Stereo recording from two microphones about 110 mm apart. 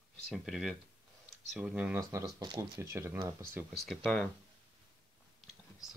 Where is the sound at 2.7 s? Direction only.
25° right (ahead or behind).